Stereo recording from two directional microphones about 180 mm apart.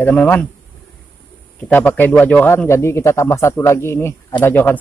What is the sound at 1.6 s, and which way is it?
A man's voice, 10° left (ahead or behind).